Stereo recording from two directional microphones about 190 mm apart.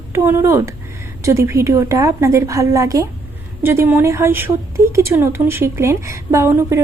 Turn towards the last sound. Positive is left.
turn(degrees=-15)  # may be behind; listen again after turning